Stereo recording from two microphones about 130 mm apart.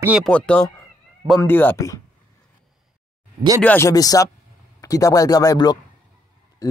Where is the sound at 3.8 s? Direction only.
25° left (ahead or behind).